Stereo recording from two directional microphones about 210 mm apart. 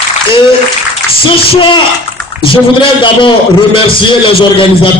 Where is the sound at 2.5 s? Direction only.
25° left (ahead or behind).